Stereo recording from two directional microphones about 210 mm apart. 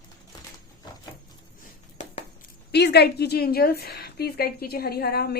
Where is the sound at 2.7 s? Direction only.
50° left (ahead or behind).